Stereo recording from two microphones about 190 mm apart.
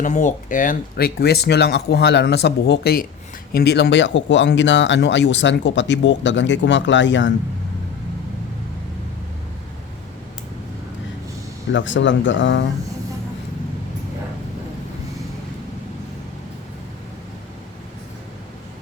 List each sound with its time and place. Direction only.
0.0 s speech: 40° left (ahead or behind); by 7.3 s 75° left (ahead or behind)
11.7 s speech: 75° left (ahead or behind)